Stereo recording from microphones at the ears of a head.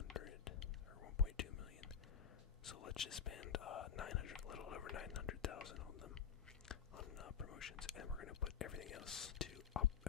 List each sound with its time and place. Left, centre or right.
0.1 s whispering: left